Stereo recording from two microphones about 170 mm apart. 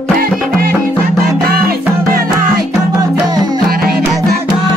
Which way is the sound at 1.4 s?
65° right (ahead or behind).